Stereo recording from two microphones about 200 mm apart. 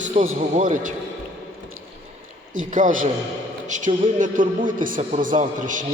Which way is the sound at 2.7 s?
40° right (ahead or behind).